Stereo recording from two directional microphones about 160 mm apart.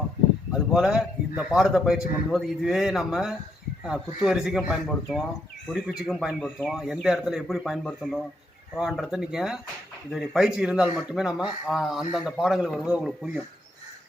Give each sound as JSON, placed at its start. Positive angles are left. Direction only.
{"t": 0.5, "sound": "speech", "side_deg": -5}